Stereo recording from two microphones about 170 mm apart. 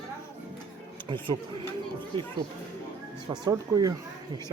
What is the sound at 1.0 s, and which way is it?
Speech, 30° right (ahead or behind).